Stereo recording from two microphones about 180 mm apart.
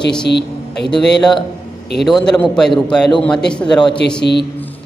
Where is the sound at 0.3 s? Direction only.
70° left (ahead or behind).